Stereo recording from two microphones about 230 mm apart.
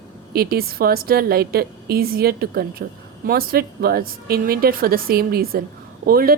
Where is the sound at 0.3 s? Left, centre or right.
Right.